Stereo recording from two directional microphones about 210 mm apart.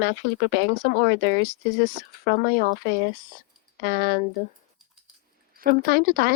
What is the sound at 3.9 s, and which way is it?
Speech, 45° right (ahead or behind).